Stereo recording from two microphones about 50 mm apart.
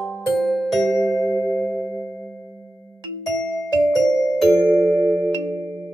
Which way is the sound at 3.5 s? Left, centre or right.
Centre.